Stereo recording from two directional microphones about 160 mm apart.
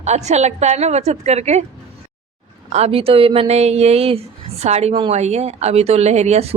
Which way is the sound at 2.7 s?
40° right (ahead or behind).